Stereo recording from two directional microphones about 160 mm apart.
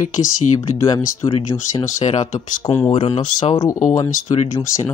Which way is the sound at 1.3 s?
35° left (ahead or behind).